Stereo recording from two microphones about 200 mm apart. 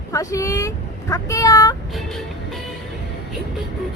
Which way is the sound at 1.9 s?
Centre (ahead or behind).